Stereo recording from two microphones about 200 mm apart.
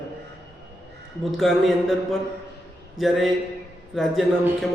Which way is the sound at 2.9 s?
Centre (ahead or behind).